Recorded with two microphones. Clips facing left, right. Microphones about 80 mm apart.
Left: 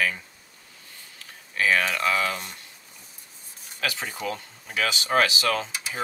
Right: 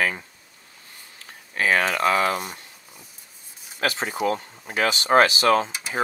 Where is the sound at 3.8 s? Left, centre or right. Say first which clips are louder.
Right 6 dB; right.